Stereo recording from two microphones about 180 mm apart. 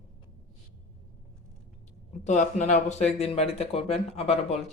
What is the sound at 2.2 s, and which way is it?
Speech, 40° left (ahead or behind).